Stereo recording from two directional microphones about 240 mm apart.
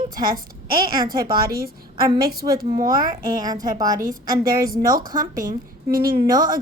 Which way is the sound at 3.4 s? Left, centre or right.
Centre.